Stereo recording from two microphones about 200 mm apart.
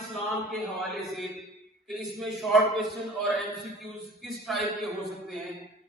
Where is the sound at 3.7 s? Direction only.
Centre (ahead or behind).